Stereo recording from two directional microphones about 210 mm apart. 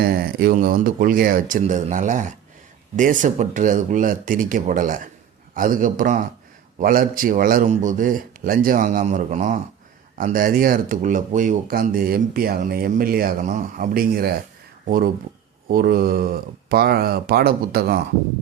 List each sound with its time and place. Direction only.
0.0 s a man's voice: 45° right (ahead or behind)